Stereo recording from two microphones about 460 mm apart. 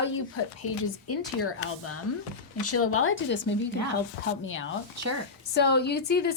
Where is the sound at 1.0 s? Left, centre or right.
Left.